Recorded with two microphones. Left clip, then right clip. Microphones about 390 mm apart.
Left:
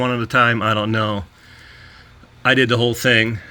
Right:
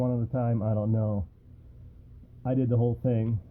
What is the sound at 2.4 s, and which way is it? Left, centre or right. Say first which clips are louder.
Speech: left 14 dB; left.